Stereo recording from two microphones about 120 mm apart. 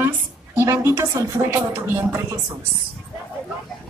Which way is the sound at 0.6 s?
25° right (ahead or behind).